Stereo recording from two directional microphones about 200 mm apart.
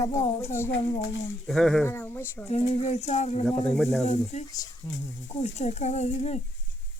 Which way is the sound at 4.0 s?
35° left (ahead or behind).